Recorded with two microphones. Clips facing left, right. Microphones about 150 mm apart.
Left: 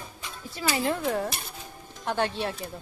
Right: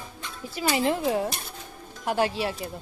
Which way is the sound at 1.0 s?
5° right (ahead or behind).